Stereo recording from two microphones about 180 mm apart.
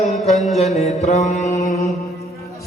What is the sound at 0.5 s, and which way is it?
Mantra, 35° left (ahead or behind).